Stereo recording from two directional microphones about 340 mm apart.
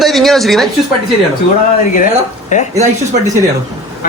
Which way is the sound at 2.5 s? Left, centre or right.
Left.